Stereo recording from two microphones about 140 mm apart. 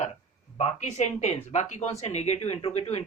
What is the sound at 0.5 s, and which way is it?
Speech, 50° left (ahead or behind).